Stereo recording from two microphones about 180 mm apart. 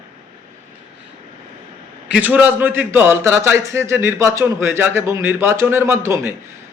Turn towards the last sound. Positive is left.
turn(degrees=-15)  # may be behind; listen again after turning